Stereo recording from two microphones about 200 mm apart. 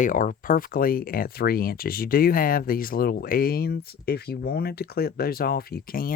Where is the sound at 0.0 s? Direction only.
40° left (ahead or behind).